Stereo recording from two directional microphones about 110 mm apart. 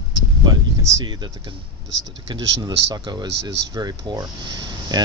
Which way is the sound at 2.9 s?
35° right (ahead or behind).